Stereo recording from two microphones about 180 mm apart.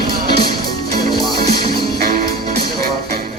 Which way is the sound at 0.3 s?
60° right (ahead or behind).